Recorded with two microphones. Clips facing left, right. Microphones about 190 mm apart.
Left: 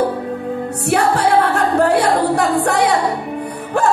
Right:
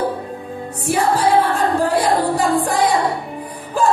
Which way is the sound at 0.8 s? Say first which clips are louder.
Left 1 dB; 65° left (ahead or behind).